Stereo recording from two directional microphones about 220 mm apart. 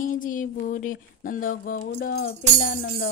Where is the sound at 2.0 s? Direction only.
45° left (ahead or behind).